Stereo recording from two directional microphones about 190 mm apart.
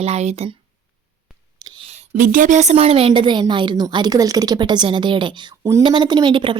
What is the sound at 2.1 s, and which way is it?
A woman's voice, 45° right (ahead or behind).